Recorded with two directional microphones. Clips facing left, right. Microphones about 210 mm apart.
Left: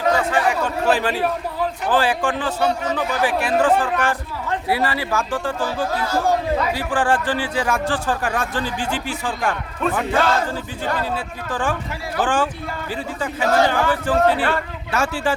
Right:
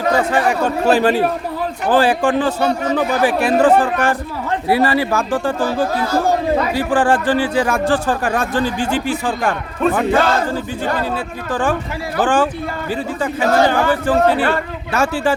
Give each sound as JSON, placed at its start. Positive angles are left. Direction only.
{"t": 0.3, "sound": "speech", "side_deg": -40}